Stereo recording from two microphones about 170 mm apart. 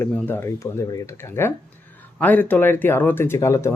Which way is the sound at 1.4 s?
15° left (ahead or behind).